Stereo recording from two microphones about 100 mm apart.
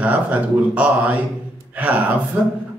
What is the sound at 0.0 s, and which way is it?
Speech, 15° right (ahead or behind).